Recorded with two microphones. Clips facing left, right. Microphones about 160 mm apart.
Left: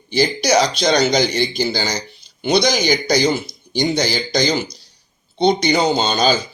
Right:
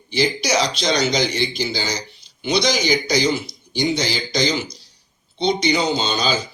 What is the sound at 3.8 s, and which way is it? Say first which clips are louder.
A man's voice: left 3 dB; 45° left (ahead or behind).